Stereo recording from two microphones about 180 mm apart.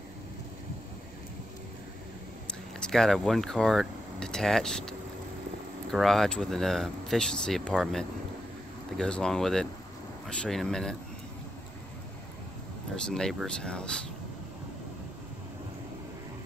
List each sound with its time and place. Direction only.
2.8 s speech: centre (ahead or behind)
13.0 s speech: 5° left (ahead or behind)